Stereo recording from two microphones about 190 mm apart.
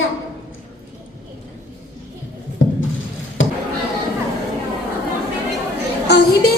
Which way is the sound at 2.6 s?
80° left.